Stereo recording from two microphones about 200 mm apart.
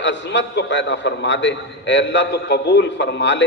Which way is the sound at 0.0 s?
60° left (ahead or behind).